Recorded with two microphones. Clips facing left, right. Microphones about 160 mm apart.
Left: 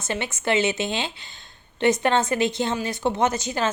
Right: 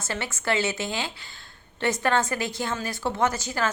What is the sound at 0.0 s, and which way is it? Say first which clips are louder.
A woman's voice: left 3 dB; 20° left (ahead or behind).